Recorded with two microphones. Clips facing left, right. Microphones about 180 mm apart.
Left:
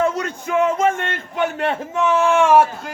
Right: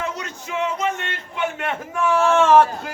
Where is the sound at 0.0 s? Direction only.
50° left (ahead or behind).